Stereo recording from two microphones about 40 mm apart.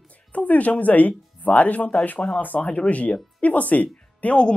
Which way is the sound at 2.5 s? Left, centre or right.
Left.